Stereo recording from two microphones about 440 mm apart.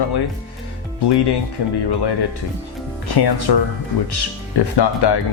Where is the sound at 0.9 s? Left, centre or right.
Left.